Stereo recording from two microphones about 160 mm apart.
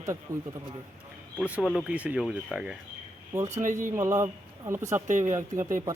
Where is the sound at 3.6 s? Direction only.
55° right (ahead or behind).